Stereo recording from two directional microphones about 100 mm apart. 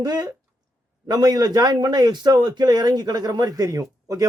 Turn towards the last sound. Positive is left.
turn(degrees=-35)  # may be behind; listen again after turning